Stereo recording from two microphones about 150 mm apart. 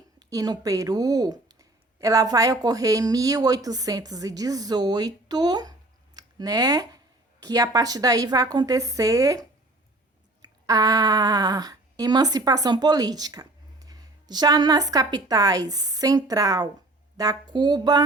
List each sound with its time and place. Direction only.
0.2 s speech: 25° right (ahead or behind)
10.7 s speech: 25° right (ahead or behind)